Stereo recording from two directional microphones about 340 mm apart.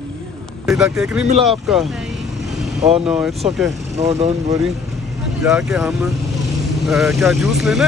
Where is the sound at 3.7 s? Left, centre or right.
Centre.